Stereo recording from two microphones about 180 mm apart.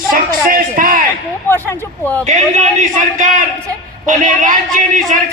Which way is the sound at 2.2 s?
40° right (ahead or behind).